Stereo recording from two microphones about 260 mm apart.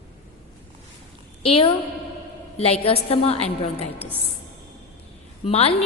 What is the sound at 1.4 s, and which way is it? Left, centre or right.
A woman's voice, left.